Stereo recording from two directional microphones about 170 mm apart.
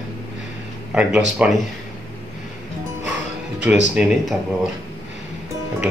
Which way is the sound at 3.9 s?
5° right (ahead or behind).